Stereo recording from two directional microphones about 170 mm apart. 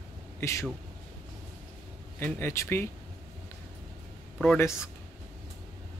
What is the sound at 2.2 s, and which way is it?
Speech, 15° left (ahead or behind).